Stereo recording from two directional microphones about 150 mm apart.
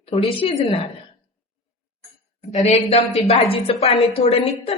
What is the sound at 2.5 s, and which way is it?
A woman's voice, 45° left (ahead or behind).